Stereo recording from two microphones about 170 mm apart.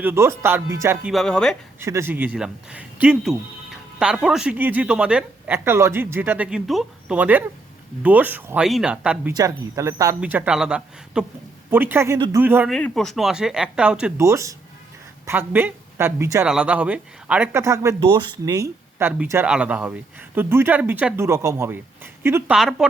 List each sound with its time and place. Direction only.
0.0 s speech: 15° right (ahead or behind)
1.0 s speech: centre (ahead or behind)
1.8 s speech: 15° right (ahead or behind)
9.3 s speech: 20° right (ahead or behind)
12.7 s speech: 5° left (ahead or behind)
14.2 s speech: 15° right (ahead or behind)
22.5 s speech: centre (ahead or behind)